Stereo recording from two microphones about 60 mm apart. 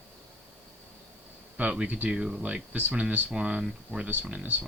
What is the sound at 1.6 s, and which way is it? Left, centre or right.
Speech, right.